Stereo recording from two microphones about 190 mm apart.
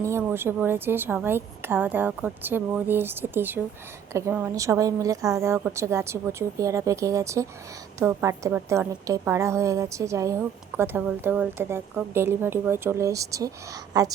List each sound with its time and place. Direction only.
0.0 s a woman's voice: 15° right (ahead or behind)